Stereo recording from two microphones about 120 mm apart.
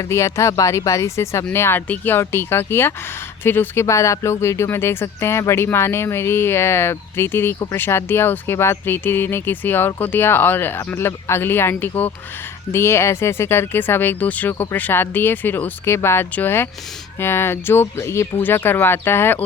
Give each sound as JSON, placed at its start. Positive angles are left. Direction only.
{"t": 0.0, "sound": "speech", "side_deg": 25}